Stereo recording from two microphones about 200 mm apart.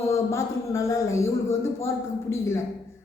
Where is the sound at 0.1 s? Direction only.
15° left (ahead or behind).